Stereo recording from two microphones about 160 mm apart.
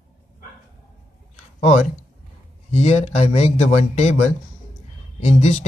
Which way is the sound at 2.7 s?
45° left (ahead or behind).